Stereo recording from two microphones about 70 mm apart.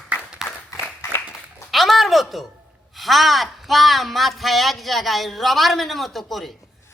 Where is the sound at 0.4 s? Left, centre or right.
Centre.